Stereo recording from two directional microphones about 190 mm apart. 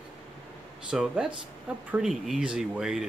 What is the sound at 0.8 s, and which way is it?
Speech, 5° right (ahead or behind).